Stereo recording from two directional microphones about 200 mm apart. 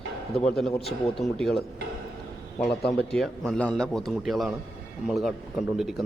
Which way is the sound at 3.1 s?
Centre (ahead or behind).